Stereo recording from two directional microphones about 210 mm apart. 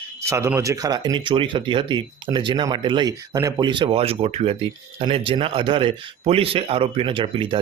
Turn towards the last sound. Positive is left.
turn(degrees=-25)  # may be behind; listen again after turning